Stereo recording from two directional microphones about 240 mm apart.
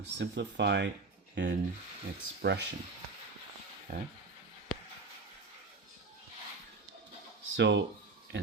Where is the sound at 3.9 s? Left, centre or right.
Right.